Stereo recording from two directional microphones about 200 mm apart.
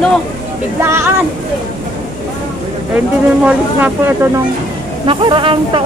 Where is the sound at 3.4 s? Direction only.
10° right (ahead or behind).